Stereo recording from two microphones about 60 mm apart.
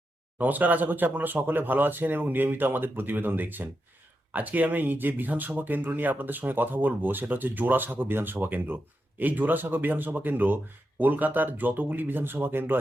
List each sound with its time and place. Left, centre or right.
0.3 s speech: right